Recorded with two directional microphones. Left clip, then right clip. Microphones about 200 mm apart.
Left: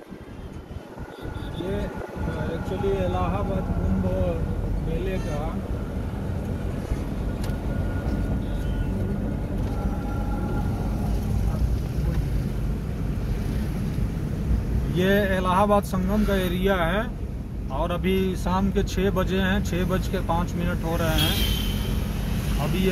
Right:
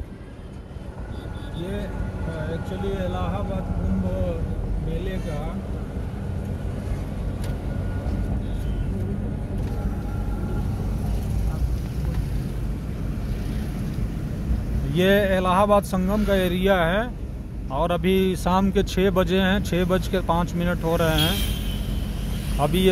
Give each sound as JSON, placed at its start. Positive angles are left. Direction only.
{"t": 15.0, "sound": "speech", "side_deg": -50}